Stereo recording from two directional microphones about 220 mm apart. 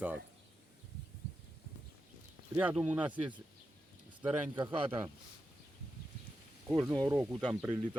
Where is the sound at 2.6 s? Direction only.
5° right (ahead or behind).